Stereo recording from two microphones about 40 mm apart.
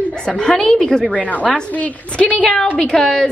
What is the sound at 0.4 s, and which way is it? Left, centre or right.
Speech, centre.